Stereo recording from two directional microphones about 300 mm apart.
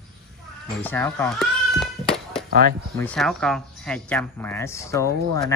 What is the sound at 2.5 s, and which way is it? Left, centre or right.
Speech, right.